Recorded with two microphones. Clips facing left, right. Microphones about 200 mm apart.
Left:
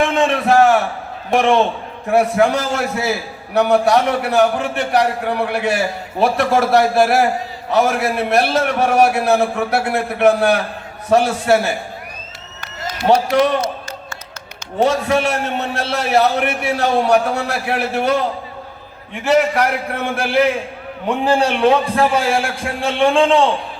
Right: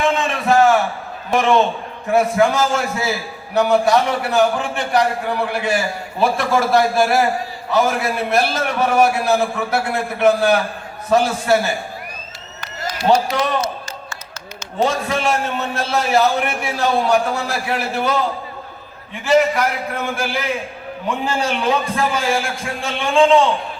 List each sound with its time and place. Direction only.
0.0 s a sound: 65° left (ahead or behind)
1.3 s a man's voice: 65° left (ahead or behind)
13.1 s a man's voice: 60° left (ahead or behind)
14.8 s a man's voice: 65° left (ahead or behind)
19.2 s a man's voice: 65° left (ahead or behind)